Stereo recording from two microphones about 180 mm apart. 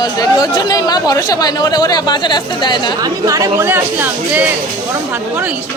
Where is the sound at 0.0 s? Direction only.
20° left (ahead or behind).